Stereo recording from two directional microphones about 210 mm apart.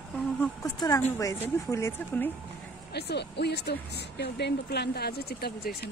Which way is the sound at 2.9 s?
55° left (ahead or behind).